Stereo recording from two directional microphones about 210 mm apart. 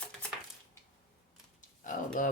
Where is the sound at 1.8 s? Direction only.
40° left (ahead or behind).